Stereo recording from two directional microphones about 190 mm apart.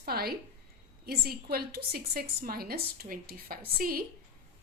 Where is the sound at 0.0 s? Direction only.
55° right (ahead or behind).